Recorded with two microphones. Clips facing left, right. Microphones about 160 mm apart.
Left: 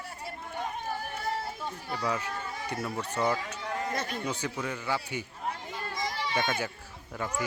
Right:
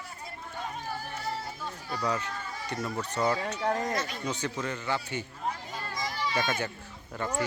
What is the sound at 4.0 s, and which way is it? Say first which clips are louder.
Speech: even; 55° left (ahead or behind).